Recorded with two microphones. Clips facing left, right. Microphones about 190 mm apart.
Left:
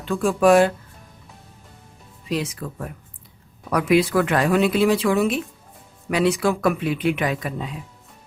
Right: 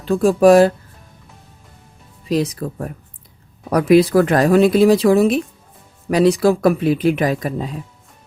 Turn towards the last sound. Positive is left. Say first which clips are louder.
# right 5 dB
turn(degrees=-40)  # may be behind; listen again after turning